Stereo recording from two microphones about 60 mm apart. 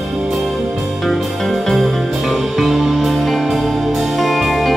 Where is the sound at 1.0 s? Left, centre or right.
Centre.